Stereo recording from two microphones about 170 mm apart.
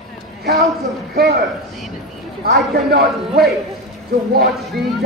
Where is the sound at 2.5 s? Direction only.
70° right (ahead or behind).